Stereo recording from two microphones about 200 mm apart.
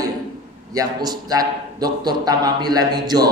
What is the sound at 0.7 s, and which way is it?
A man's voice, 20° right (ahead or behind).